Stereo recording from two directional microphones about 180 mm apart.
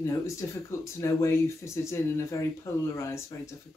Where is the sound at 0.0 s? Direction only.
15° left (ahead or behind).